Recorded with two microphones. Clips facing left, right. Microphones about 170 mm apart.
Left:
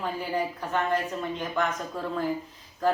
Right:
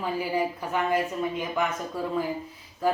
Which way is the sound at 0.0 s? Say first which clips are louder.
Right 2 dB; 10° right (ahead or behind).